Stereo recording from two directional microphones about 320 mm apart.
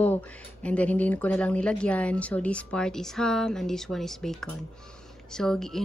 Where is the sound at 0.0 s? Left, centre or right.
Centre.